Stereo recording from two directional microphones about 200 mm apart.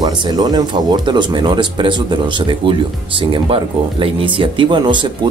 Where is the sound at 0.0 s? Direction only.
20° right (ahead or behind).